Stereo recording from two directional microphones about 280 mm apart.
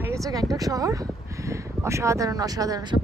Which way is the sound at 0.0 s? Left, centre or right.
Centre.